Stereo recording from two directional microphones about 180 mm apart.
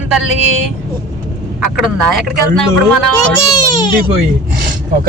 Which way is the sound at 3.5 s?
20° left (ahead or behind).